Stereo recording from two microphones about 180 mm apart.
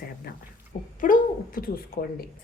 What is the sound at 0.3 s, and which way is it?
Speech, 55° left (ahead or behind).